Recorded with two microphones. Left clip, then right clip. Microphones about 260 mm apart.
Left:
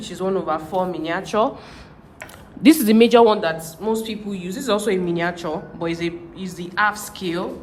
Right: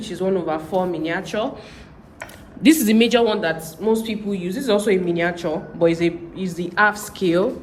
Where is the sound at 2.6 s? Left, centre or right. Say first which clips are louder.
Left 2 dB; left.